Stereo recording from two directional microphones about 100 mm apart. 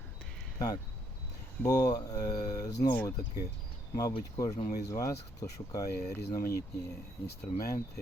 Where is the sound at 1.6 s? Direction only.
40° left (ahead or behind).